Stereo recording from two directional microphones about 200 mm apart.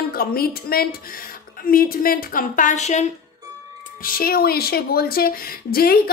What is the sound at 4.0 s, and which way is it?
Speech, 45° left (ahead or behind).